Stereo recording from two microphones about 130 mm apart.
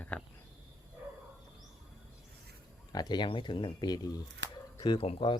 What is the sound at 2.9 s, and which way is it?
Speech, 30° left (ahead or behind).